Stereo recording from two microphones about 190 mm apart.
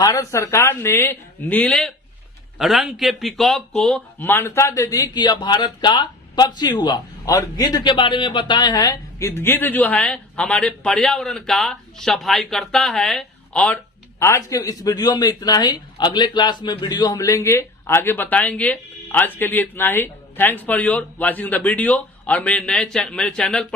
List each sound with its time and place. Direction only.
0.0 s a man's voice: 20° left (ahead or behind)
14.2 s a man's voice: 15° left (ahead or behind)